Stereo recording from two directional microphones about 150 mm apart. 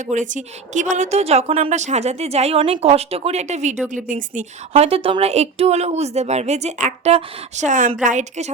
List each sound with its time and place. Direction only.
0.1 s a woman's voice: 55° right (ahead or behind)
4.7 s a woman's voice: 40° right (ahead or behind)